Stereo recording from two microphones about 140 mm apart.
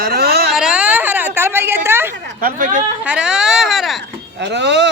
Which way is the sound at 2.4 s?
80° right.